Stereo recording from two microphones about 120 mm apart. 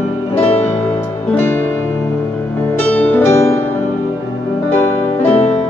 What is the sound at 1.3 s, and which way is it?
Music, 20° left (ahead or behind).